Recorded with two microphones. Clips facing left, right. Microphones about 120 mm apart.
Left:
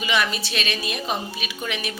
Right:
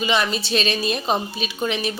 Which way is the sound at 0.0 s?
30° right (ahead or behind).